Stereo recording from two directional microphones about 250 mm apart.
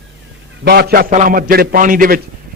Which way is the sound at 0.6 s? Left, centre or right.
Right.